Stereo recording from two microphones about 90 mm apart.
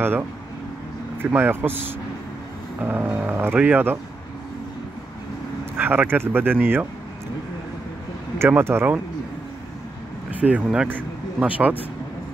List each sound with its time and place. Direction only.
1.2 s speech: 25° right (ahead or behind)
5.8 s speech: 20° right (ahead or behind)
8.4 s speech: 25° right (ahead or behind)
10.3 s speech: 15° right (ahead or behind)